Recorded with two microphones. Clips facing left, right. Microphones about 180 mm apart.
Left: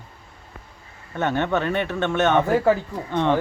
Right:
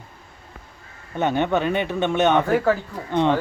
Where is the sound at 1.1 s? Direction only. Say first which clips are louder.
Right 2 dB; 15° right (ahead or behind).